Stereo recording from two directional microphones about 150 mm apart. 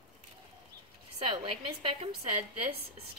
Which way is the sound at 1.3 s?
40° right (ahead or behind).